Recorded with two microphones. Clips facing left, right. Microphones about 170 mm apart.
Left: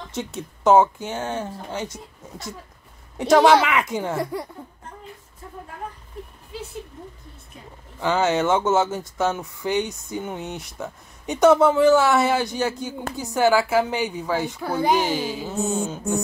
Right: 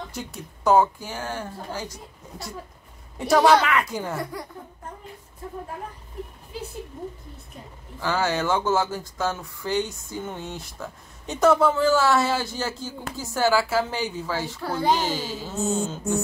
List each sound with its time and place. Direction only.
0.1 s speech: 25° left (ahead or behind)
8.0 s a child's voice: 20° left (ahead or behind)